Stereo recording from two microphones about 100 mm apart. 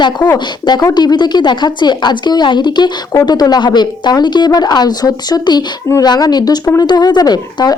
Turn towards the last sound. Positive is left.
turn(degrees=45)  # may be behind; listen again after turning